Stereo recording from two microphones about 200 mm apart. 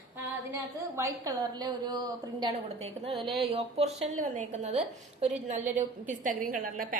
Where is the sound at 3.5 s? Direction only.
30° right (ahead or behind).